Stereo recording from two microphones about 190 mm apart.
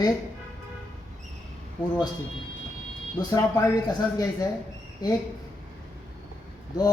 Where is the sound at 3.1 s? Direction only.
20° left (ahead or behind).